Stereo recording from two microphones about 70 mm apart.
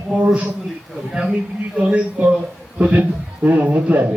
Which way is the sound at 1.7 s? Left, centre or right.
Centre.